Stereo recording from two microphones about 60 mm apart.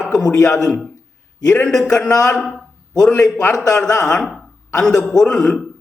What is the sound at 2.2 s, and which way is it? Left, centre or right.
A man's voice, centre.